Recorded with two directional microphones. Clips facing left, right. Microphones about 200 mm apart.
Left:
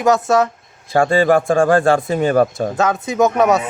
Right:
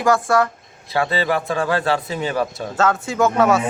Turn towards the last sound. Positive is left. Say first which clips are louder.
# left 2 dB
turn(degrees=20)  # may be behind; listen again after turning